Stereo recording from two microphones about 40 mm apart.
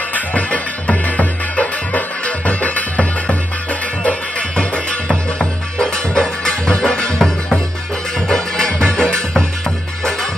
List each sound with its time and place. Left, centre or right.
0.1 s music: left
5.4 s music: centre
7.2 s music: centre